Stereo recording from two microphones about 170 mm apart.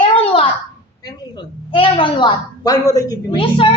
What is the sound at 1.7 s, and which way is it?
A child's voice, 30° left (ahead or behind).